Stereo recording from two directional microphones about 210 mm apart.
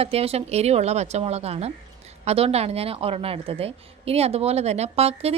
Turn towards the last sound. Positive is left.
turn(degrees=-30)  # may be behind; listen again after turning